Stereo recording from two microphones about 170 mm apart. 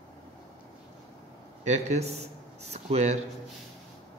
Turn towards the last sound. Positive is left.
turn(degrees=-40)  # may be behind; listen again after turning